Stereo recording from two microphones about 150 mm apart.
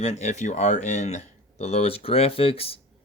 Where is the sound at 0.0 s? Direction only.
50° left (ahead or behind).